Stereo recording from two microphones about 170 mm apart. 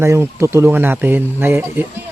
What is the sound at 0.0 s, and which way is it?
Speech, 15° right (ahead or behind).